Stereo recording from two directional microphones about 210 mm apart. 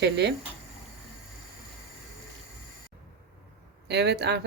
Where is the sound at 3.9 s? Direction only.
55° right (ahead or behind).